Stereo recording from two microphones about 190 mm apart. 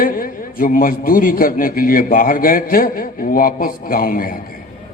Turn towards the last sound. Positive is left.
turn(degrees=50)  # may be behind; listen again after turning